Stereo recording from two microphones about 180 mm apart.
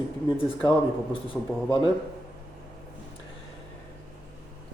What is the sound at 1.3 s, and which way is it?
Speech, 5° left (ahead or behind).